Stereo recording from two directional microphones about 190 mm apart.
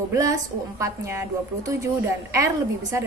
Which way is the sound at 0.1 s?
15° right (ahead or behind).